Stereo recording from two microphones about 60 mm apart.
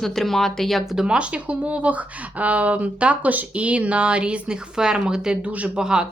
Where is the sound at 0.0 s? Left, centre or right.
Centre.